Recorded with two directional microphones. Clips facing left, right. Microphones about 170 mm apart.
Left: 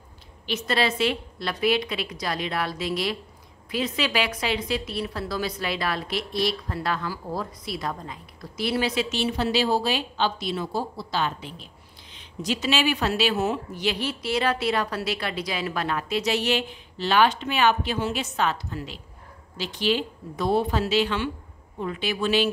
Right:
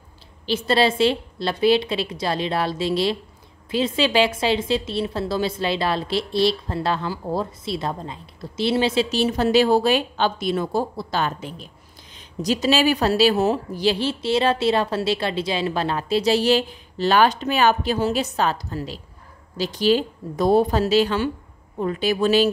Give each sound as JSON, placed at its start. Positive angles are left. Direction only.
{"t": 0.5, "sound": "a woman's voice", "side_deg": -30}